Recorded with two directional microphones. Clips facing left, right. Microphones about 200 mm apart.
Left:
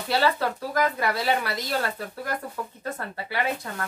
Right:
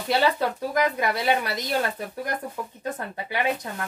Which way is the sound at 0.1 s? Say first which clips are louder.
Right 1 dB; 20° right (ahead or behind).